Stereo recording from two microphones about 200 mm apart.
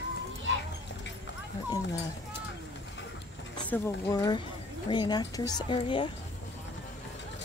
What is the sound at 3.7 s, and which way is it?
Speech, 20° left (ahead or behind).